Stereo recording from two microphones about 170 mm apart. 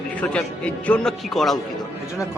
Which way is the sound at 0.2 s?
5° left (ahead or behind).